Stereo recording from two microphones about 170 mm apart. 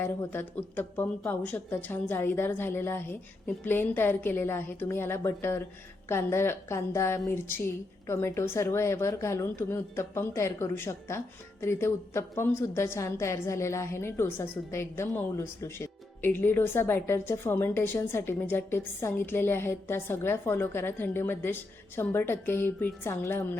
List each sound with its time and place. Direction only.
0.0 s a woman's voice: 10° left (ahead or behind)